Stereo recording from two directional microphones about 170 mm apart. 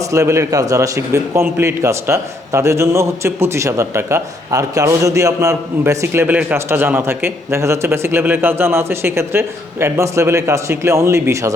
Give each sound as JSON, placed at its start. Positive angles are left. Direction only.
{"t": 0.1, "sound": "a man's voice", "side_deg": -15}